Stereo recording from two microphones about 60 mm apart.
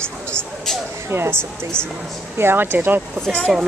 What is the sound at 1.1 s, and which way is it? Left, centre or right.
Speech, right.